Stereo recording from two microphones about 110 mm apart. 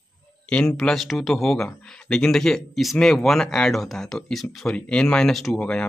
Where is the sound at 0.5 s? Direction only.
5° left (ahead or behind).